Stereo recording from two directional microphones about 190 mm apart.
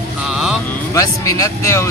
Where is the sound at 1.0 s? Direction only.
15° left (ahead or behind).